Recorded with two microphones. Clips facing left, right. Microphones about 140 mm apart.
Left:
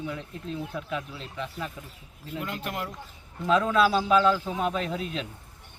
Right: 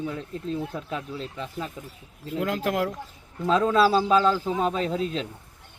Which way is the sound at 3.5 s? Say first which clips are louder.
Right 2 dB; 35° right (ahead or behind).